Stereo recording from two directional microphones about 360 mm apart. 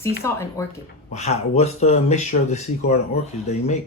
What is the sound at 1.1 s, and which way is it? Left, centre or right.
Speech, centre.